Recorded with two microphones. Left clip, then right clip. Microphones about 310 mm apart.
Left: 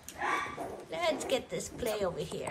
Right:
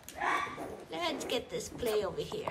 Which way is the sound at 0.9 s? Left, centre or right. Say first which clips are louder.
Left 3 dB; centre.